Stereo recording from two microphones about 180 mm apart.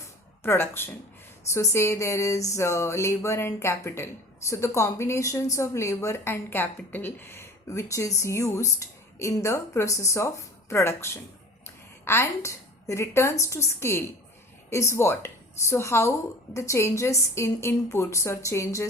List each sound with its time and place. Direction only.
0.4 s a woman's voice: 15° left (ahead or behind)